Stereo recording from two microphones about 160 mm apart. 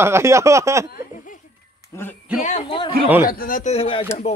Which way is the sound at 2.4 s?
35° left (ahead or behind).